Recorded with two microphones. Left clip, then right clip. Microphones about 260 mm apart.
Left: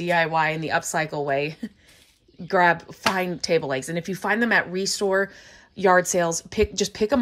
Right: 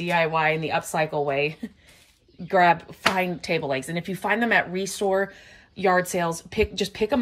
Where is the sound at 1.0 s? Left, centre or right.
Centre.